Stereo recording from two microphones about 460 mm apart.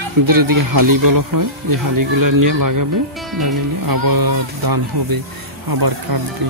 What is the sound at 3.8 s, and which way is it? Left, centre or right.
Speech, right.